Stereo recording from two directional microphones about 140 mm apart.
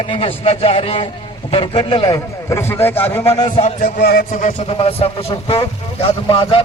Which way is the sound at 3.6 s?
55° left (ahead or behind).